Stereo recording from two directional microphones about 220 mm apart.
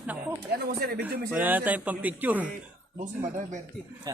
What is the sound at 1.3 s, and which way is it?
Speech, 10° right (ahead or behind).